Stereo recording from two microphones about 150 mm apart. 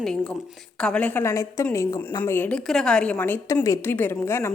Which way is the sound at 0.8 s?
5° left (ahead or behind).